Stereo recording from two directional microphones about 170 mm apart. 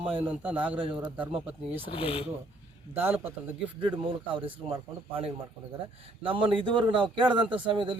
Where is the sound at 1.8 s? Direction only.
35° left (ahead or behind).